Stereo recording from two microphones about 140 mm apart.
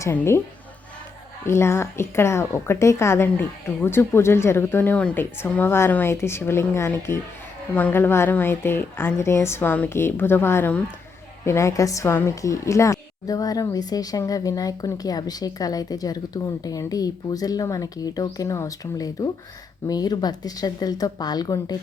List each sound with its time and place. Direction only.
0.0 s a woman's voice: 20° left (ahead or behind)
1.5 s a woman's voice: 20° left (ahead or behind)